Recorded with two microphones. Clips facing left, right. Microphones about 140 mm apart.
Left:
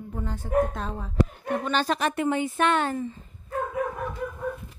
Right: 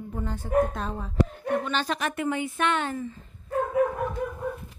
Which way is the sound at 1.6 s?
40° left (ahead or behind).